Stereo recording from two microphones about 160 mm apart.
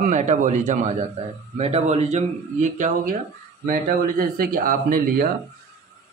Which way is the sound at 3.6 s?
60° right (ahead or behind).